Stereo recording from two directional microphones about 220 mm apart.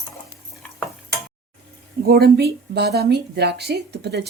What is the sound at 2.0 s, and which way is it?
Speech, 45° right (ahead or behind).